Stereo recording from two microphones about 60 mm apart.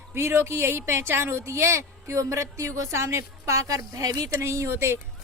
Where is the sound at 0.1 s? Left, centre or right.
Right.